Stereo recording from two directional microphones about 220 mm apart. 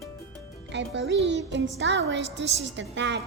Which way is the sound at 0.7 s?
55° right (ahead or behind).